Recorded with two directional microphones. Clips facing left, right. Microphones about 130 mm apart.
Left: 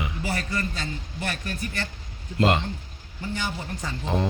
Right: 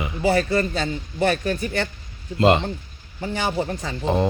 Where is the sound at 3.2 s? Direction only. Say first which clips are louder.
Right 7 dB; 75° right (ahead or behind).